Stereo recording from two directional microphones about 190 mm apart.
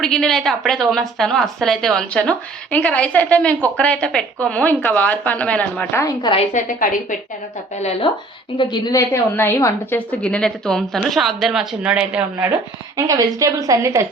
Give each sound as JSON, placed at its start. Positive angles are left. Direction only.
{"t": 0.0, "sound": "a woman's voice", "side_deg": 5}
{"t": 6.3, "sound": "a woman's voice", "side_deg": 40}
{"t": 8.5, "sound": "a woman's voice", "side_deg": 20}